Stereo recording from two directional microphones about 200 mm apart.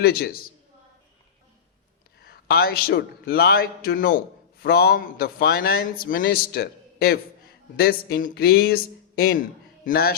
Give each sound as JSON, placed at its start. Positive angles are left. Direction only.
{"t": 0.0, "sound": "a man's voice", "side_deg": 50}
{"t": 2.2, "sound": "a man's voice", "side_deg": 50}
{"t": 9.8, "sound": "a man's voice", "side_deg": 50}